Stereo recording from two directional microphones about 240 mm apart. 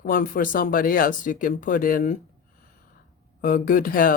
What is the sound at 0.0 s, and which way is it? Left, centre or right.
Speech, left.